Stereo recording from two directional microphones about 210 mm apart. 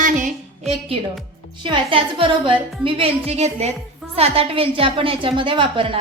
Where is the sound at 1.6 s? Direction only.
25° right (ahead or behind).